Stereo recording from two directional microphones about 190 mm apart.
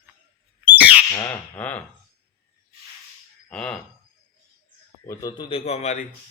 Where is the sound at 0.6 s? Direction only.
10° right (ahead or behind).